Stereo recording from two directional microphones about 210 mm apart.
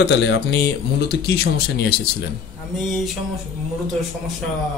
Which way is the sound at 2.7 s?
Centre (ahead or behind).